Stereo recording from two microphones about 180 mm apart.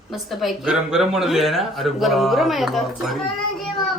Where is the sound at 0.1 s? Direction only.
Centre (ahead or behind).